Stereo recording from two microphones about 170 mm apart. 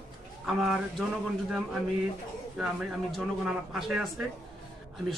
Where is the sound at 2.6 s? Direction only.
5° right (ahead or behind).